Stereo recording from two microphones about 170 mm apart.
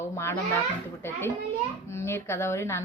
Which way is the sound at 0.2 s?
15° left (ahead or behind).